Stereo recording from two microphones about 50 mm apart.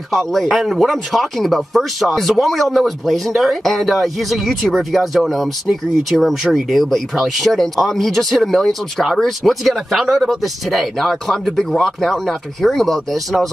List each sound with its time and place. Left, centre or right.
0.1 s speech: centre